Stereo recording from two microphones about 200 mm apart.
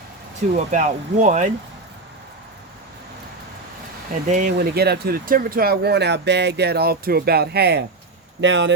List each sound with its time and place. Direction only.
0.5 s speech: 40° right (ahead or behind)
4.1 s speech: 40° right (ahead or behind)
4.5 s speech: 50° right (ahead or behind)